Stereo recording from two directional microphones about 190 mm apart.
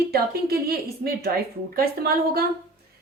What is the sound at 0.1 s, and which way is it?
A woman's voice, 55° right (ahead or behind).